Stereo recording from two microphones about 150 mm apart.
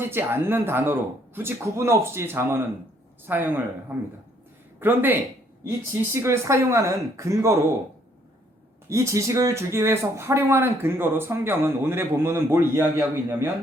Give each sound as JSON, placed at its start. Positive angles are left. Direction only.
{"t": 0.0, "sound": "speech", "side_deg": -15}
{"t": 6.1, "sound": "speech", "side_deg": -20}
{"t": 8.9, "sound": "speech", "side_deg": -20}